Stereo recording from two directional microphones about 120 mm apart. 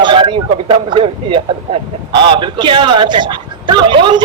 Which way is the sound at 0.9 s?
45° right (ahead or behind).